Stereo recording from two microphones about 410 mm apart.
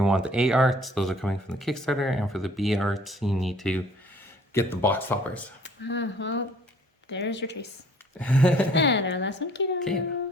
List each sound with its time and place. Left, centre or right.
0.0 s speech: centre
5.6 s speech: left
8.2 s speech: centre
8.7 s speech: left